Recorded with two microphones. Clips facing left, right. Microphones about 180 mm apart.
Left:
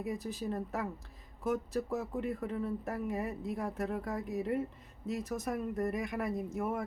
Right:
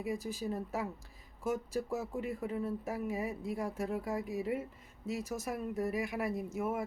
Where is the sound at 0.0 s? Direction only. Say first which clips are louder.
Even; 5° right (ahead or behind).